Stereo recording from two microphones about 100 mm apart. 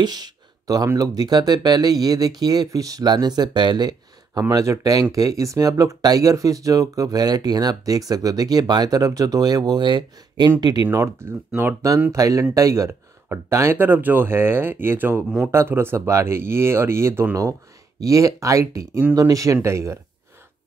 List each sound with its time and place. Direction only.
0.0 s a sound: 45° right (ahead or behind)
0.9 s speech: 40° right (ahead or behind)
4.4 s speech: 35° right (ahead or behind)
10.9 s speech: 25° right (ahead or behind)
12.1 s speech: 35° right (ahead or behind)